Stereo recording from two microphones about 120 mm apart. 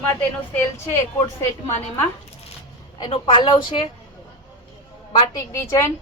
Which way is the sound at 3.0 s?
45° left (ahead or behind).